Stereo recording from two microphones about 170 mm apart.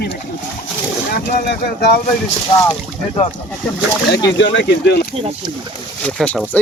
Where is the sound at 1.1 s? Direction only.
65° left (ahead or behind).